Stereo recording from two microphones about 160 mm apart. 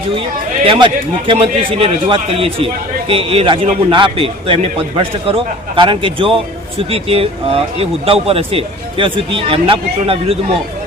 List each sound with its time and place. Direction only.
0.6 s a man's voice: 35° right (ahead or behind)